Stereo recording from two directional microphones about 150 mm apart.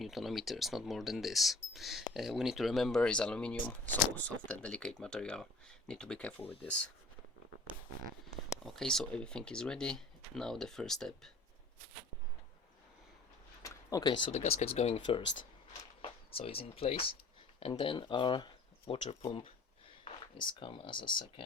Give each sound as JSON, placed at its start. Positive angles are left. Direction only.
{"t": 0.0, "sound": "speech", "side_deg": 0}
{"t": 8.6, "sound": "speech", "side_deg": 5}
{"t": 13.6, "sound": "a sound", "side_deg": 25}
{"t": 14.3, "sound": "speech", "side_deg": 45}
{"t": 20.5, "sound": "speech", "side_deg": 35}